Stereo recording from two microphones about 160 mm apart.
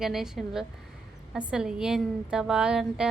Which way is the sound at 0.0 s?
Centre (ahead or behind).